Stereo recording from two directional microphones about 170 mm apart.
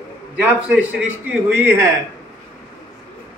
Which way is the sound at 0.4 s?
10° right (ahead or behind).